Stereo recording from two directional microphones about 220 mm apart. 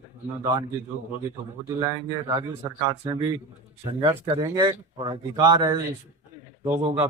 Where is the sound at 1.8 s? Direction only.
15° right (ahead or behind).